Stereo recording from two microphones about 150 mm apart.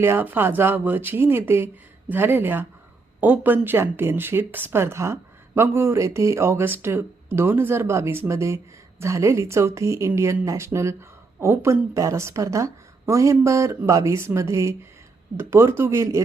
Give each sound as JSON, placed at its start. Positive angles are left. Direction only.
{"t": 0.0, "sound": "a woman's voice", "side_deg": -15}